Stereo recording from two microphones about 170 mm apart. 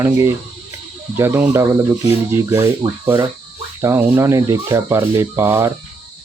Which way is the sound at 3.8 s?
15° right (ahead or behind).